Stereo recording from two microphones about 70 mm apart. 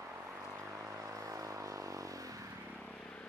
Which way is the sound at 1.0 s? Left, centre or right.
Right.